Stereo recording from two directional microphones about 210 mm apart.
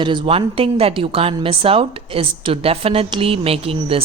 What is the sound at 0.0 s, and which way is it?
Speech, 25° right (ahead or behind).